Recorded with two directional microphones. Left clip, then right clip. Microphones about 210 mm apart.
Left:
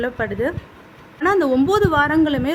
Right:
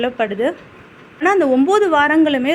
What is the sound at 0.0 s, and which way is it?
A woman's voice, centre (ahead or behind).